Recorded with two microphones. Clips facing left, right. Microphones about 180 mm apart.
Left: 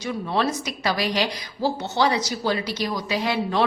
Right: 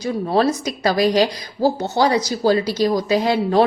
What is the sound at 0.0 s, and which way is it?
A woman's voice, 35° right (ahead or behind).